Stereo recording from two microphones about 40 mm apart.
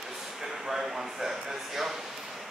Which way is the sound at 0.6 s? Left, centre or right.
Centre.